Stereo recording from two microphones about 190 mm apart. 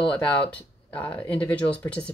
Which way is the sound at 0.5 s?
5° left (ahead or behind).